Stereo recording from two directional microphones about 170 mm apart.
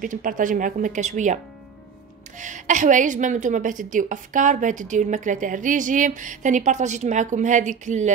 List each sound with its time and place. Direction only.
0.0 s a woman's voice: 50° right (ahead or behind)